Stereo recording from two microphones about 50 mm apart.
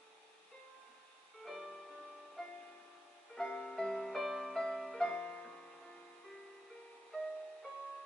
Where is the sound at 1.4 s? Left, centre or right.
Centre.